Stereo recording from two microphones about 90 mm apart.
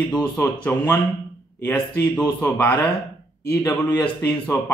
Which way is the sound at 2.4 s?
20° left (ahead or behind).